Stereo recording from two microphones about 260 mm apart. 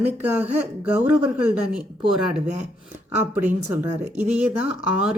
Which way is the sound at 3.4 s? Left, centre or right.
Centre.